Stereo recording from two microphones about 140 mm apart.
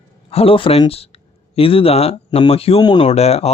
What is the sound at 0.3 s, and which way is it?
Speech, 45° left (ahead or behind).